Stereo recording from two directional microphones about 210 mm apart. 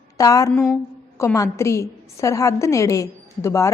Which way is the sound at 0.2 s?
15° left (ahead or behind).